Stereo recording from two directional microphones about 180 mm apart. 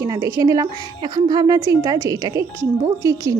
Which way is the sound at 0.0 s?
20° right (ahead or behind).